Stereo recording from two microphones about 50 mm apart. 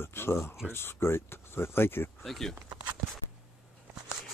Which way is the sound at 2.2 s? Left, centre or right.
Centre.